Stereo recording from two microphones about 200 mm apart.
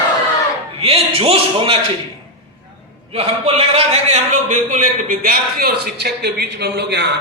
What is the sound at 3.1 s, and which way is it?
A man's voice, 30° right (ahead or behind).